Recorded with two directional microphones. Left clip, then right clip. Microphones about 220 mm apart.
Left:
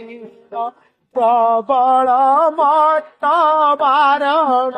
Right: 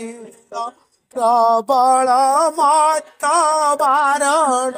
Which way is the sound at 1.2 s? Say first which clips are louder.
Even; 35° right (ahead or behind).